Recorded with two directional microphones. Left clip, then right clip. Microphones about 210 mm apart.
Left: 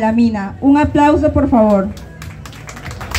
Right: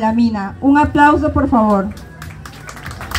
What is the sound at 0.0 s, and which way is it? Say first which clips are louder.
Speech: left 1 dB; 20° left (ahead or behind).